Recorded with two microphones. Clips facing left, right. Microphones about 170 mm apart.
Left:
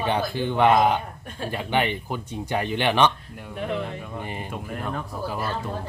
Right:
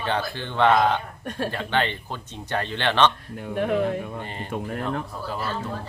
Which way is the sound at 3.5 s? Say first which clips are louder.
Right 6 dB; 60° right (ahead or behind).